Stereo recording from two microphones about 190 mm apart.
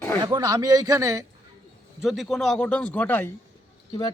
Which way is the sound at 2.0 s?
Centre (ahead or behind).